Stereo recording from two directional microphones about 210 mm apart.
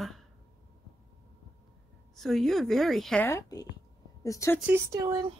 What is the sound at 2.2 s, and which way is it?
A woman's voice, centre (ahead or behind).